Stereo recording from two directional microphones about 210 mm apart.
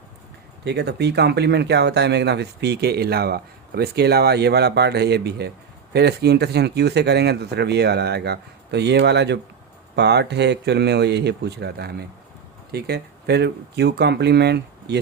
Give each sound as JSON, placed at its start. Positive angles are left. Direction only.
{"t": 0.6, "sound": "speech", "side_deg": -50}